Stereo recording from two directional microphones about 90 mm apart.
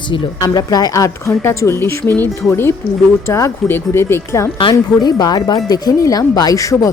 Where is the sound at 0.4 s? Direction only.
45° left (ahead or behind).